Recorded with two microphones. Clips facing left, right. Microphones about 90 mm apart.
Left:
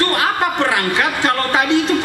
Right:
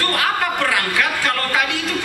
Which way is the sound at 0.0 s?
25° left (ahead or behind).